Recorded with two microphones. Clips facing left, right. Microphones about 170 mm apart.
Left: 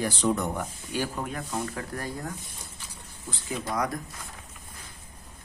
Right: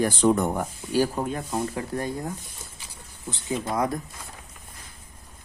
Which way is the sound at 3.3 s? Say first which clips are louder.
Right 4 dB; 25° right (ahead or behind).